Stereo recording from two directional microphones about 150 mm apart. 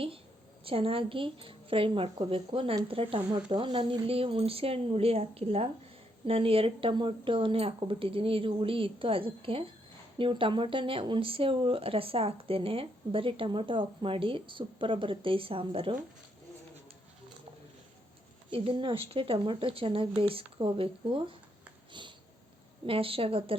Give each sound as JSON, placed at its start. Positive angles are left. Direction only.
{"t": 0.6, "sound": "speech", "side_deg": -40}
{"t": 18.5, "sound": "speech", "side_deg": -35}
{"t": 22.9, "sound": "speech", "side_deg": -35}